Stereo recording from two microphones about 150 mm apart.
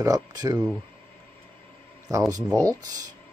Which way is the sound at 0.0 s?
25° right (ahead or behind).